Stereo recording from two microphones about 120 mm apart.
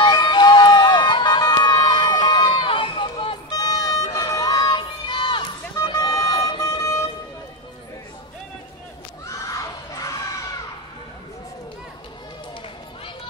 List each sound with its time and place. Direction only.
0.0 s crowd: 40° left (ahead or behind)
5.8 s vehicle: 30° left (ahead or behind)
6.7 s music: 25° left (ahead or behind)
9.4 s crowd: 25° left (ahead or behind)